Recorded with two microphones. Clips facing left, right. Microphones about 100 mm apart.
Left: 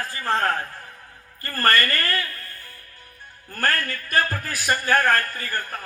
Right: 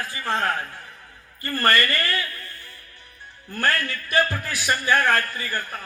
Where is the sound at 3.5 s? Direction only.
45° left (ahead or behind).